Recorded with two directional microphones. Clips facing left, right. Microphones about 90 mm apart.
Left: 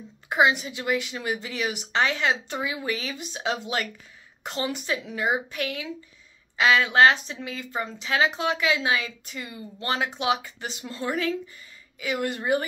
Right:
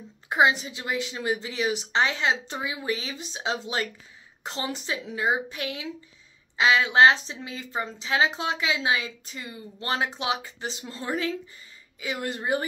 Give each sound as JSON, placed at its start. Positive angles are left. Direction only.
{"t": 0.3, "sound": "a woman's voice", "side_deg": -30}